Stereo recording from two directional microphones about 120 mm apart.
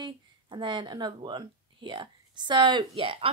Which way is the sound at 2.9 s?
50° right (ahead or behind).